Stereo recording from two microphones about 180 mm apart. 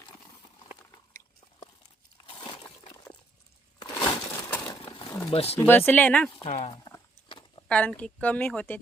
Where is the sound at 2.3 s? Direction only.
25° left (ahead or behind).